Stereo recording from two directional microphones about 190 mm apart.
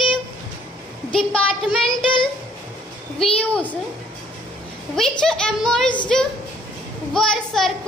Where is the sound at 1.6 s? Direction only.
25° left (ahead or behind).